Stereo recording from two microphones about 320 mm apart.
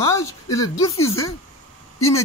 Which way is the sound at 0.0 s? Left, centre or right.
Centre.